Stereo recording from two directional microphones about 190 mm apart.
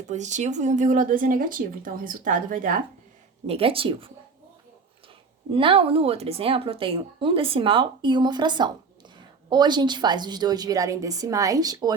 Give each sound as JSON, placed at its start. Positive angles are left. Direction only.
{"t": 0.1, "sound": "speech", "side_deg": -40}
{"t": 3.4, "sound": "speech", "side_deg": -30}
{"t": 5.5, "sound": "speech", "side_deg": -30}